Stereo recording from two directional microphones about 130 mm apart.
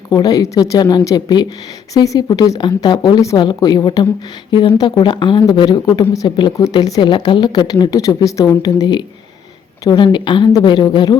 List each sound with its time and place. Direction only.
0.1 s speech: 30° left (ahead or behind)